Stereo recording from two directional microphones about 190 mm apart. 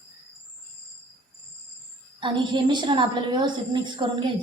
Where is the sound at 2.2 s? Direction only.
25° right (ahead or behind).